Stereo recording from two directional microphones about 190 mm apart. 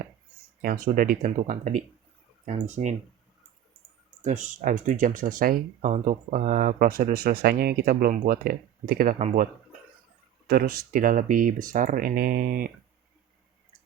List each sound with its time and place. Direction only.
0.6 s speech: 50° right (ahead or behind)
4.2 s speech: 40° right (ahead or behind)
10.5 s speech: 50° right (ahead or behind)